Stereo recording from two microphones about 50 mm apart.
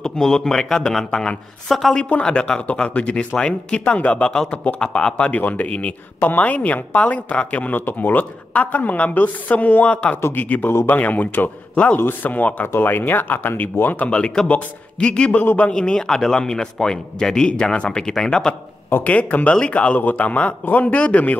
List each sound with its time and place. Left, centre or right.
0.0 s speech: centre
2.0 s speech: left
2.2 s speech: centre
2.6 s a man's voice: left
12.0 s speech: left
12.7 s speech: left
13.9 s speech: left
19.0 s speech: left
20.0 s speech: left